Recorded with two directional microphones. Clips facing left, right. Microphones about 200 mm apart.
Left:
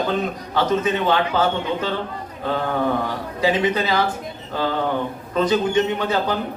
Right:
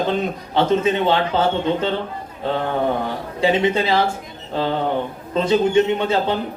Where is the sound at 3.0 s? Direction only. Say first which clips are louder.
Right 2 dB; 25° right (ahead or behind).